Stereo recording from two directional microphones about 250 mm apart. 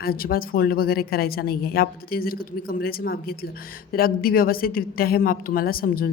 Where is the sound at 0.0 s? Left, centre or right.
Left.